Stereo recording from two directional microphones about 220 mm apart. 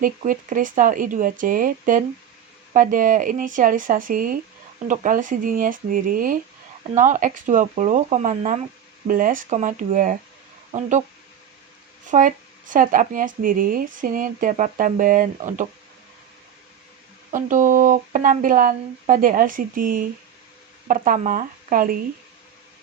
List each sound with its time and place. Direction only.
0.0 s speech: 35° right (ahead or behind)
12.1 s speech: 35° right (ahead or behind)
17.3 s speech: 35° right (ahead or behind)